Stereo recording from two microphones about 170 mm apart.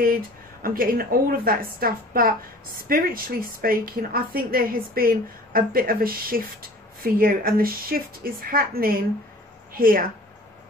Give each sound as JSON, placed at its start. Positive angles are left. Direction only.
{"t": 0.0, "sound": "a woman's voice", "side_deg": -55}